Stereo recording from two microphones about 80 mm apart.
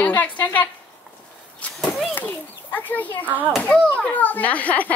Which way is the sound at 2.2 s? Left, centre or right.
Left.